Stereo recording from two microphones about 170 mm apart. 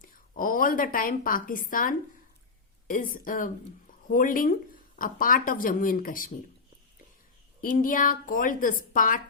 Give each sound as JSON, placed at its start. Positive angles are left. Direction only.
{"t": 0.0, "sound": "a woman's voice", "side_deg": 55}
{"t": 7.6, "sound": "speech", "side_deg": 55}